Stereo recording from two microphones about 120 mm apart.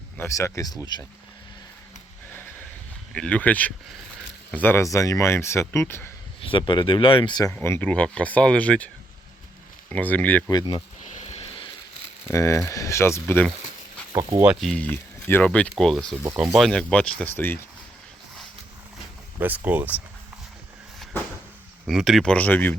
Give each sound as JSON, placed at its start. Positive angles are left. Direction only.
{"t": 0.2, "sound": "speech", "side_deg": 25}
{"t": 3.2, "sound": "speech", "side_deg": 10}
{"t": 6.4, "sound": "speech", "side_deg": 45}
{"t": 7.4, "sound": "speech", "side_deg": 20}
{"t": 9.9, "sound": "speech", "side_deg": 15}
{"t": 10.5, "sound": "speech", "side_deg": 40}
{"t": 11.0, "sound": "a sound", "side_deg": 65}
{"t": 12.3, "sound": "speech", "side_deg": 25}
{"t": 14.4, "sound": "speech", "side_deg": 0}
{"t": 14.8, "sound": "speech", "side_deg": 15}
{"t": 19.4, "sound": "speech", "side_deg": -15}
{"t": 21.8, "sound": "speech", "side_deg": 0}